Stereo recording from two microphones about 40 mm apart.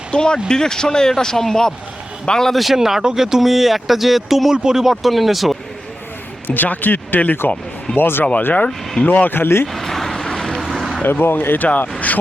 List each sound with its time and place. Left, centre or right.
0.1 s a man's voice: left
2.5 s speech: centre
2.7 s speech: centre
4.5 s speech: centre
6.5 s speech: left
7.9 s speech: left
8.4 s speech: left
9.0 s speech: left
9.3 s speech: left
9.7 s vehicle: centre
10.6 s vehicle: centre
11.0 s speech: left
11.9 s vehicle: left